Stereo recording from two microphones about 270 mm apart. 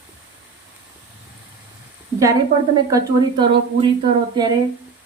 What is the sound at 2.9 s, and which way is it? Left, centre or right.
Speech, centre.